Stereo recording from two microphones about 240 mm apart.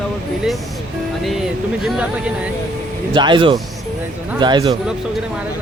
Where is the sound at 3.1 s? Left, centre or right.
Centre.